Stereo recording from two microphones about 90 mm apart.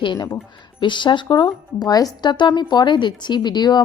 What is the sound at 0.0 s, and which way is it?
A woman's voice, 60° left (ahead or behind).